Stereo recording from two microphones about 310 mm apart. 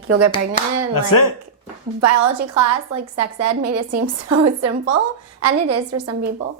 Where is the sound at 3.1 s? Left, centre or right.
Right.